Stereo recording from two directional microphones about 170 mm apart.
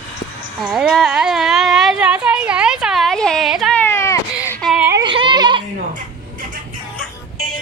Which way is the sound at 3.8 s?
15° left (ahead or behind).